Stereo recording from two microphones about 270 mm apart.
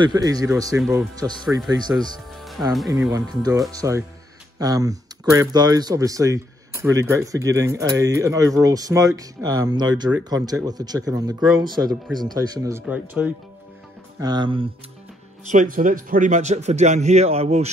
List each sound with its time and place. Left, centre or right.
0.0 s speech: centre
2.3 s music: centre
3.1 s speech: centre
15.4 s a man's voice: right